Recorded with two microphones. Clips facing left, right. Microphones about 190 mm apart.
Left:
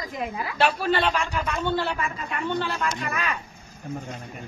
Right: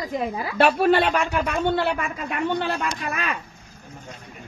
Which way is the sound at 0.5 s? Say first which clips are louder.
Right 6 dB; 55° right (ahead or behind).